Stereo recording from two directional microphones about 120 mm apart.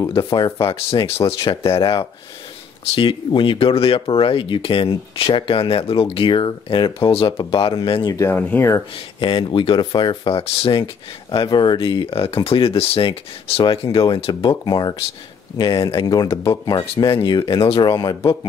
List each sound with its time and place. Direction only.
0.1 s speech: 45° left (ahead or behind)
8.3 s speech: 15° left (ahead or behind)
8.9 s speech: 45° left (ahead or behind)
16.1 s speech: 30° left (ahead or behind)
17.2 s speech: 40° left (ahead or behind)